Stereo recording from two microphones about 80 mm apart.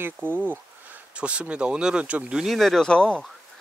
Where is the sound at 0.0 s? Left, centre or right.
Right.